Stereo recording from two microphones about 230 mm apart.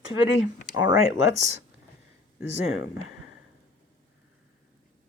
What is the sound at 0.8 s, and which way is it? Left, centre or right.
Speech, centre.